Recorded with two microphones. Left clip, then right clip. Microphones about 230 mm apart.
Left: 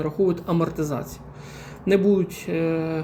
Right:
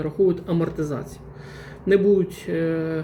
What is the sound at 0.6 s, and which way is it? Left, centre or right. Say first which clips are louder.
Speech: even; left.